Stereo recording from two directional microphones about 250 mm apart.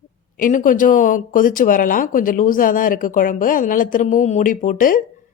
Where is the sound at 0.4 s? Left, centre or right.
Left.